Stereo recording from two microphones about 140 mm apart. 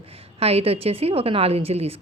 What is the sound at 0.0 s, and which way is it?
A woman's voice, 45° right (ahead or behind).